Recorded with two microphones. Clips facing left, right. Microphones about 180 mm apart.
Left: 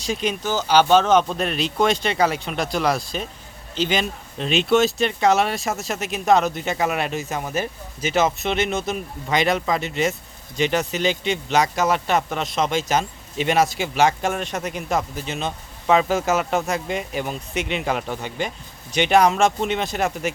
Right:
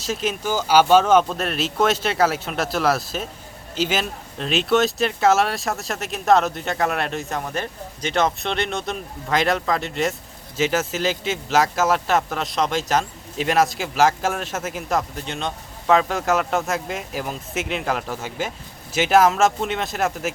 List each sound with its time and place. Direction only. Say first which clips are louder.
0.0 s speech: even; centre (ahead or behind)